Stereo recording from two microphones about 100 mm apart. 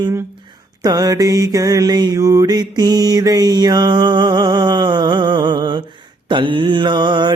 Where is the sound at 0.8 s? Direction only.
40° right (ahead or behind).